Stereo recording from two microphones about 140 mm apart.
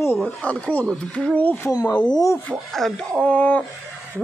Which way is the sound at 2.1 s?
25° left (ahead or behind).